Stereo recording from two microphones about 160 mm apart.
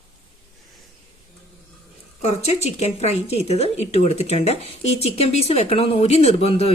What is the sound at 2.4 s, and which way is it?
Speech, 40° left (ahead or behind).